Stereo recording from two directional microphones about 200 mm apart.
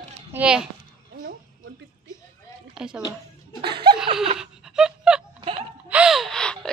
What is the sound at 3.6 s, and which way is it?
Laughter, 25° right (ahead or behind).